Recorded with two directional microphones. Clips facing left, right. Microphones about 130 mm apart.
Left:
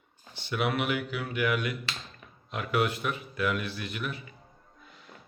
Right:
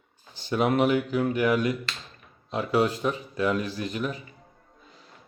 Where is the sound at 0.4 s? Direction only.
40° right (ahead or behind).